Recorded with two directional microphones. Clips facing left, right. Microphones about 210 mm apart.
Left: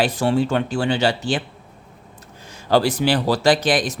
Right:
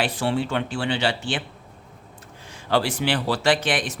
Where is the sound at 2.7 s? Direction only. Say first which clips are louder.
Left 5 dB; 40° left (ahead or behind).